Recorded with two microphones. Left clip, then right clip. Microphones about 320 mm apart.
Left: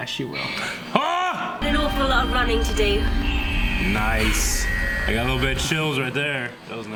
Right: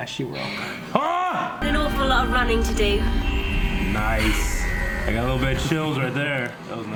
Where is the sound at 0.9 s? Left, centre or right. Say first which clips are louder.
Even; right.